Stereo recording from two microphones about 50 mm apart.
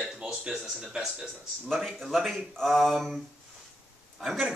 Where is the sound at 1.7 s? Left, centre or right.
Centre.